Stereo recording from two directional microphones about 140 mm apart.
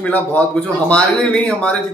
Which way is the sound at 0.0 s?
10° left (ahead or behind).